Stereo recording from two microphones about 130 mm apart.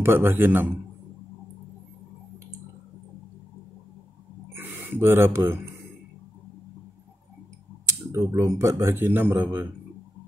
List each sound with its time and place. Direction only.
0.0 s a man's voice: 15° right (ahead or behind)
4.6 s speech: 15° right (ahead or behind)
7.8 s speech: 25° right (ahead or behind)